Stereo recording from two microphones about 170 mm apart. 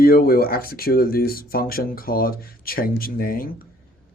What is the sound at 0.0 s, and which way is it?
A man's voice, 60° left (ahead or behind).